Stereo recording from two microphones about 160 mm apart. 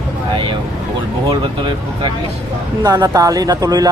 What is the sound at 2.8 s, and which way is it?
Speech, 25° right (ahead or behind).